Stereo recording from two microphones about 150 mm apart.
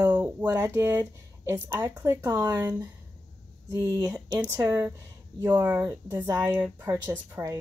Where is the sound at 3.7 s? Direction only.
20° right (ahead or behind).